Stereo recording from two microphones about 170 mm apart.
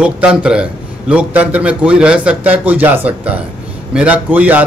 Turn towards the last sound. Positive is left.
turn(degrees=-10)  # may be behind; listen again after turning